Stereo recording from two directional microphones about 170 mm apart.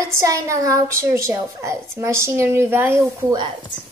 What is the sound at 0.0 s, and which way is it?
A child's voice, 20° right (ahead or behind).